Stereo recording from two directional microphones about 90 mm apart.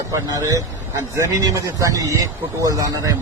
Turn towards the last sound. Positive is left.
turn(degrees=-40)  # may be behind; listen again after turning